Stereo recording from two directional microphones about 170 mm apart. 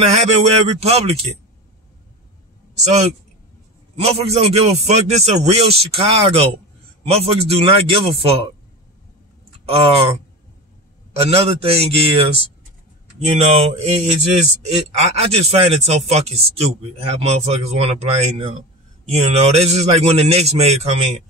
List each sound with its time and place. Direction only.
0.0 s a man's voice: 40° right (ahead or behind)
2.7 s a man's voice: 40° right (ahead or behind)
9.7 s a man's voice: 35° right (ahead or behind)
11.1 s a man's voice: 35° right (ahead or behind)